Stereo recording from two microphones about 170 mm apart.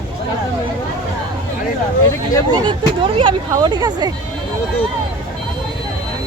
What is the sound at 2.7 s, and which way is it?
Speech, 30° right (ahead or behind).